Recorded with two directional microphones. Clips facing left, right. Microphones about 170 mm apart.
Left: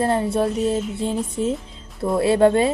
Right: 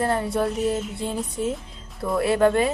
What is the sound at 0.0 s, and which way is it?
A woman's voice, 25° left (ahead or behind).